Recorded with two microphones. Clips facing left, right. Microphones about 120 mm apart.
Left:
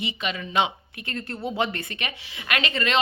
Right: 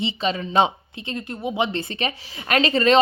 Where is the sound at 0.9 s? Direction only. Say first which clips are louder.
Right 3 dB; 20° right (ahead or behind).